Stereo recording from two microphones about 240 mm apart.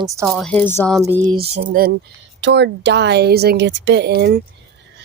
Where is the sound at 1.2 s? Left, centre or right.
Right.